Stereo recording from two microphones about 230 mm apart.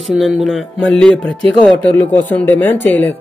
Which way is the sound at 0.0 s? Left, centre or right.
Centre.